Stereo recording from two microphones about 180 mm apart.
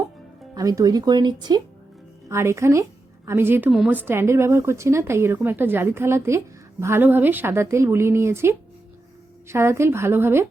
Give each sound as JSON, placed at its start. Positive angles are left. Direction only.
{"t": 0.5, "sound": "a woman's voice", "side_deg": -20}